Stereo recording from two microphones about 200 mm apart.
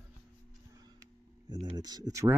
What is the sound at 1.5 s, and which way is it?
Speech, 20° right (ahead or behind).